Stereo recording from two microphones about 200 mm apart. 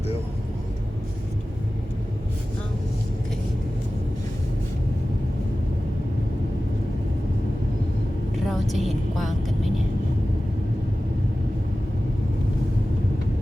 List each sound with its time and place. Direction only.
8.4 s vehicle: centre (ahead or behind)